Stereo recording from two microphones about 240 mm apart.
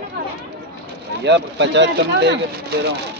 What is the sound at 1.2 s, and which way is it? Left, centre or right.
Speech, right.